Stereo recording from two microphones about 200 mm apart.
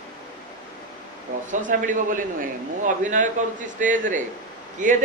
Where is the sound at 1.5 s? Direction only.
40° right (ahead or behind).